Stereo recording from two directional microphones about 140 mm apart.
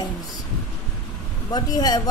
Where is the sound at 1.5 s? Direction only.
25° left (ahead or behind).